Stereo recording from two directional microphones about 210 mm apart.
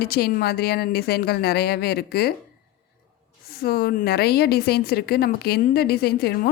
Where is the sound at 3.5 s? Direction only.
45° left (ahead or behind).